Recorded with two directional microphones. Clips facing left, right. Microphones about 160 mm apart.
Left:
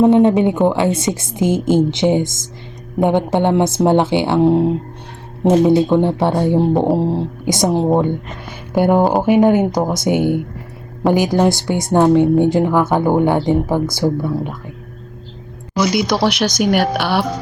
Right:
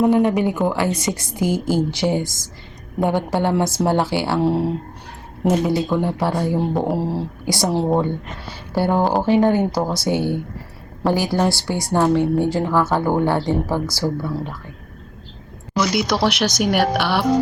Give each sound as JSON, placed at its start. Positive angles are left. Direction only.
{"t": 0.0, "sound": "a woman's voice", "side_deg": 25}
{"t": 15.9, "sound": "a woman's voice", "side_deg": 0}